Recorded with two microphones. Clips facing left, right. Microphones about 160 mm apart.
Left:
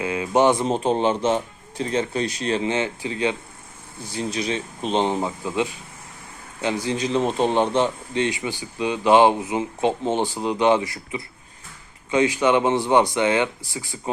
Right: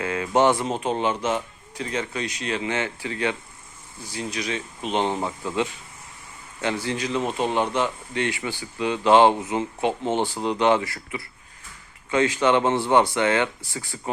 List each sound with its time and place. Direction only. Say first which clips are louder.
0.0 s a man's voice: left 1 dB; 15° left (ahead or behind)
0.7 s speech: left 4 dB; 30° left (ahead or behind)
5.0 s a man's voice: left 2 dB; 15° left (ahead or behind)